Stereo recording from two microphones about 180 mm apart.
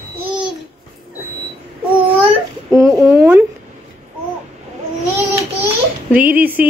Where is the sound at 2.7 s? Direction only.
15° right (ahead or behind).